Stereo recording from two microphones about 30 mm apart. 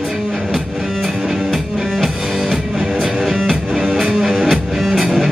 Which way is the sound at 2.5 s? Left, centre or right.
Centre.